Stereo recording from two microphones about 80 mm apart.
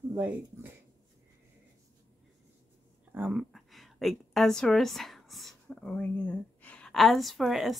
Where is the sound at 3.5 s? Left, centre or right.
Centre.